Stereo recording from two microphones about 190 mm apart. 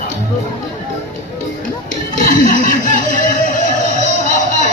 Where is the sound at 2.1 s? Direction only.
45° left (ahead or behind).